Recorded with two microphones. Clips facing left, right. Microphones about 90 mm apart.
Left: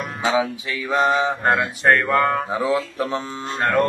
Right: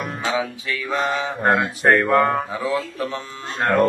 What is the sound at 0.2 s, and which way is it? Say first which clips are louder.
Music: left 5 dB; 20° left (ahead or behind).